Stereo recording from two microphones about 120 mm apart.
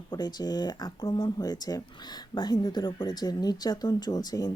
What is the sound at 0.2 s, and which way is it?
Speech, 35° left (ahead or behind).